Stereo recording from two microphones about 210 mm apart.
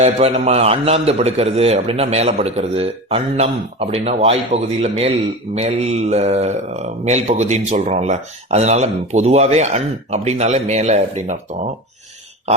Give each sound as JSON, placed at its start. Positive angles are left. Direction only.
{"t": 0.0, "sound": "a man's voice", "side_deg": -30}